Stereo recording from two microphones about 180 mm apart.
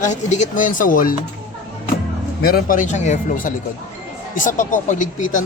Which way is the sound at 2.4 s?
55° left (ahead or behind).